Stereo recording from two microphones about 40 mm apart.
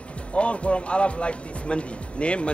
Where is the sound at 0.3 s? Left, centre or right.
Left.